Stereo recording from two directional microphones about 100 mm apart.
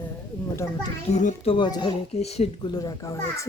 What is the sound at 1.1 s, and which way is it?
Speech, 90° left.